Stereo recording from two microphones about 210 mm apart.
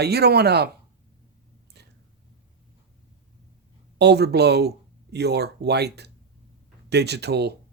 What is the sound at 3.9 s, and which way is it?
Speech, 50° right (ahead or behind).